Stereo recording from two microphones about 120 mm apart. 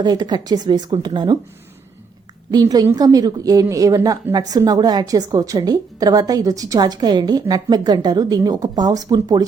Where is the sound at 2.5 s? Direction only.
35° right (ahead or behind).